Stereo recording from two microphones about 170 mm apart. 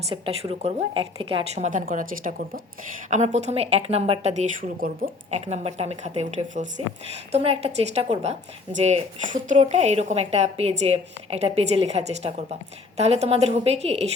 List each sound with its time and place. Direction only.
0.1 s a woman's voice: 35° right (ahead or behind); by 2.6 s 55° right (ahead or behind)
3.1 s a woman's voice: 40° right (ahead or behind)
7.3 s a woman's voice: 35° right (ahead or behind)